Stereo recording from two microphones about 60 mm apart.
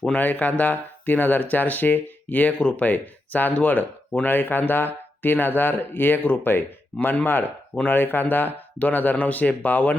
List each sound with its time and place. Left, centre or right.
0.1 s speech: left